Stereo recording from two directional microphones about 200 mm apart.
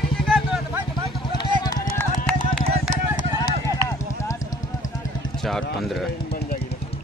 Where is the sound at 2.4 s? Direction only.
35° right (ahead or behind).